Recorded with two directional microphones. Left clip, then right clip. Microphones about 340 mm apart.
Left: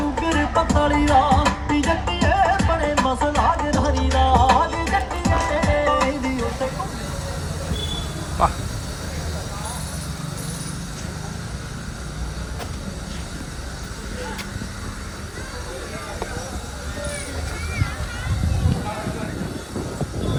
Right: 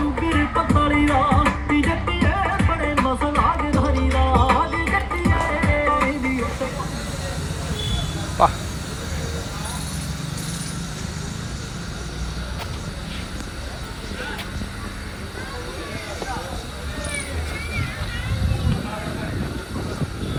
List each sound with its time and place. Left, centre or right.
0.2 s music: left
8.4 s speech: centre